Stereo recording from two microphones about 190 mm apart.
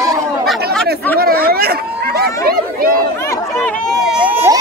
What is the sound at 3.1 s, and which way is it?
Chatter, 15° left (ahead or behind).